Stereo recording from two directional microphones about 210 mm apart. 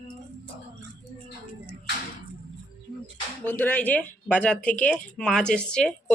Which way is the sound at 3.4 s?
10° left (ahead or behind).